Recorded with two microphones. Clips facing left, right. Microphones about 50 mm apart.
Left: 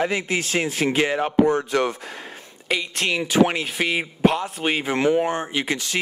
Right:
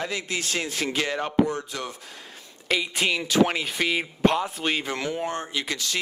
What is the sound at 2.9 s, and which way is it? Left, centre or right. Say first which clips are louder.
Speech: left 2 dB; centre.